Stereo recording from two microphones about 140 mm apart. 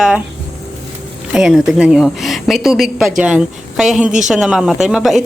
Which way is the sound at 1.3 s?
5° right (ahead or behind).